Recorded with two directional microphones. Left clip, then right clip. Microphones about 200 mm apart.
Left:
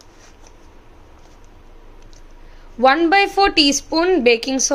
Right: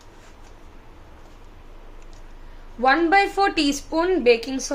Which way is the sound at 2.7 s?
35° left (ahead or behind).